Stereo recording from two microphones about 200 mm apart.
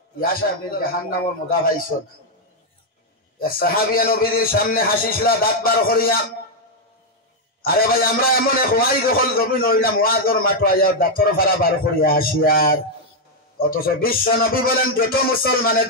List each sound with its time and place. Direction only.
0.2 s a man's voice: 45° left (ahead or behind)
3.3 s a man's voice: 45° left (ahead or behind)
7.6 s a man's voice: 45° left (ahead or behind)